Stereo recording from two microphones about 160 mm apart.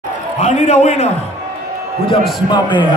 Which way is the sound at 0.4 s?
45° left (ahead or behind).